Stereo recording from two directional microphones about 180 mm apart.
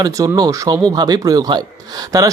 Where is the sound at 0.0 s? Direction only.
20° right (ahead or behind).